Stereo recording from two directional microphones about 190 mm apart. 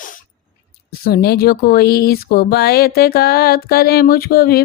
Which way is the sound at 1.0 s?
55° left (ahead or behind).